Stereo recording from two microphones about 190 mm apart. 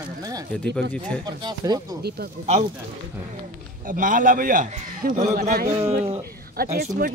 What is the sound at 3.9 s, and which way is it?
A man's voice, 45° right (ahead or behind).